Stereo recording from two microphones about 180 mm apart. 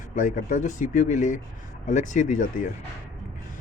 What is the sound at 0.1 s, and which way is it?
Speech, 45° left (ahead or behind).